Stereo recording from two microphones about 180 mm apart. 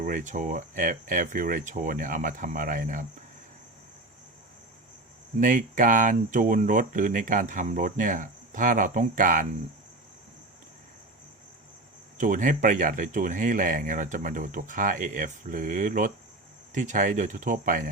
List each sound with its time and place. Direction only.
0.0 s speech: 45° right (ahead or behind)
5.4 s speech: 45° right (ahead or behind)
12.1 s speech: 45° right (ahead or behind)